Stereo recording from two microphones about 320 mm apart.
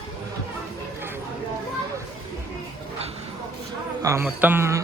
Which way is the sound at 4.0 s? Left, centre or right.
Centre.